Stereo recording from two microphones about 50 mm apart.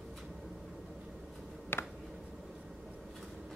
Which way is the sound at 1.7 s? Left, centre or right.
Left.